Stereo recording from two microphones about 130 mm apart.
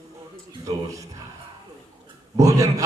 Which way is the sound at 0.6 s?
25° right (ahead or behind).